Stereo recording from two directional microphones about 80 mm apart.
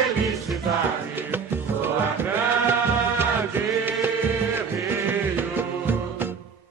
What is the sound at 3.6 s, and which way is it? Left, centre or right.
Chant, right.